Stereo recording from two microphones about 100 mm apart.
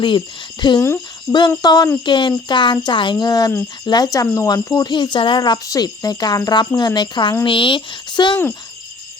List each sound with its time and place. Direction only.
0.6 s speech: 50° left (ahead or behind)